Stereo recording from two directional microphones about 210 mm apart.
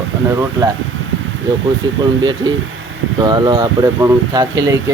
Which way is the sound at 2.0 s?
20° right (ahead or behind).